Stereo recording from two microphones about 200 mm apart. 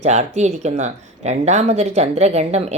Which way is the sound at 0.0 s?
35° right (ahead or behind).